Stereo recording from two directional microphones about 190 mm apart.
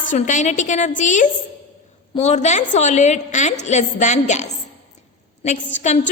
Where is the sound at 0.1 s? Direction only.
40° left (ahead or behind).